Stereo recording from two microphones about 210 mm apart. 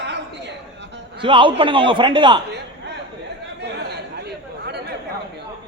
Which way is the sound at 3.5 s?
50° right (ahead or behind).